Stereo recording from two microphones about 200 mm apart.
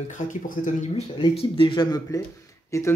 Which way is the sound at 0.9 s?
25° left (ahead or behind).